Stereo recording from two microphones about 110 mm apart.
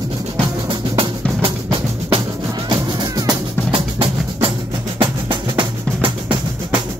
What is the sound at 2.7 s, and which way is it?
Music, 40° right (ahead or behind).